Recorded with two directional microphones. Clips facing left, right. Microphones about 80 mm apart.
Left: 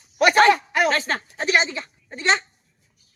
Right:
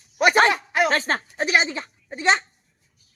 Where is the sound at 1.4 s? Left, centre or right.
Centre.